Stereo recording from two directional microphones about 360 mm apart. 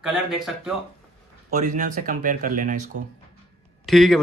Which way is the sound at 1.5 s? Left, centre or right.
Centre.